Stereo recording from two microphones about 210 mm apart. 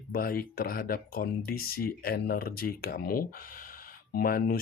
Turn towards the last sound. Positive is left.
turn(degrees=45)  # may be behind; listen again after turning